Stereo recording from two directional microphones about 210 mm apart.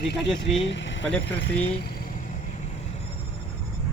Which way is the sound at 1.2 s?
60° left (ahead or behind).